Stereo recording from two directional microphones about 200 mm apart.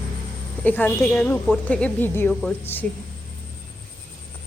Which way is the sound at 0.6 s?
10° left (ahead or behind).